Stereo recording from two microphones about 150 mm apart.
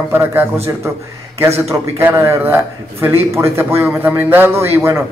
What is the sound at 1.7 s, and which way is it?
A man's voice, 15° right (ahead or behind).